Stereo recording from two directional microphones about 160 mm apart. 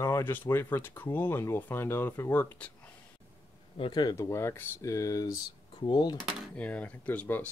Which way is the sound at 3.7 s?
30° left (ahead or behind).